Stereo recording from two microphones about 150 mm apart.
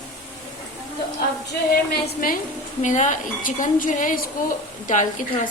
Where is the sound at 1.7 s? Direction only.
80° left.